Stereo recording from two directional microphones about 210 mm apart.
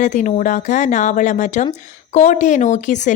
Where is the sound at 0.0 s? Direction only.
35° left (ahead or behind).